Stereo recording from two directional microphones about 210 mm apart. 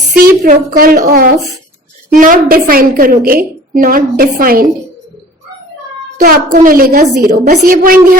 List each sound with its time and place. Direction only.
0.2 s a woman's voice: 45° right (ahead or behind)
6.1 s a woman's voice: 45° right (ahead or behind)